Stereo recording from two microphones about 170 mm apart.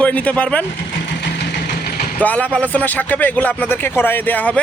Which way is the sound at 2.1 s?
10° left (ahead or behind).